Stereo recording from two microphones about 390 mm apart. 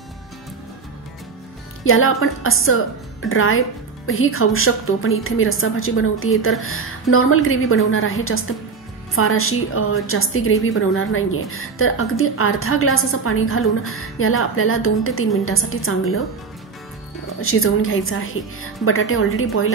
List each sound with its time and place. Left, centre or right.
1.9 s a woman's voice: left
17.4 s a woman's voice: left